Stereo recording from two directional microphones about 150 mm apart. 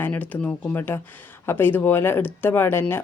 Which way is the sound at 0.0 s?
10° left (ahead or behind).